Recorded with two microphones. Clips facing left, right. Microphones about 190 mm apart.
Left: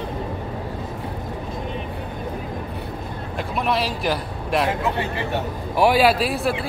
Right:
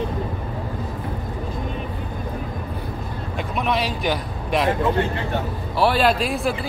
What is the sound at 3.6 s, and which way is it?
A man's voice, centre (ahead or behind).